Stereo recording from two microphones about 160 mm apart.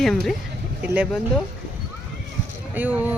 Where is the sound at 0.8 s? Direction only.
10° right (ahead or behind).